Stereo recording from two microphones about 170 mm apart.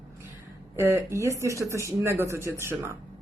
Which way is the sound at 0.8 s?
15° right (ahead or behind).